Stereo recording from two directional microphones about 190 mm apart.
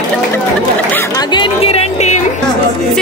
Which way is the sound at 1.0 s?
20° left (ahead or behind).